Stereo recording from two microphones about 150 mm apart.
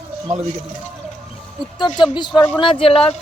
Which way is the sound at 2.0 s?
30° left (ahead or behind).